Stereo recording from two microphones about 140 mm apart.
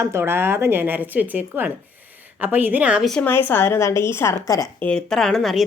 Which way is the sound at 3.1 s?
15° left (ahead or behind).